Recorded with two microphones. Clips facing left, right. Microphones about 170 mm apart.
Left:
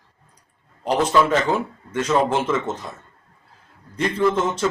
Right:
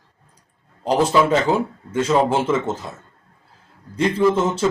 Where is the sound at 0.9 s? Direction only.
10° right (ahead or behind).